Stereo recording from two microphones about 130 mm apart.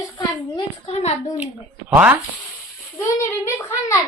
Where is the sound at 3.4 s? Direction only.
20° left (ahead or behind).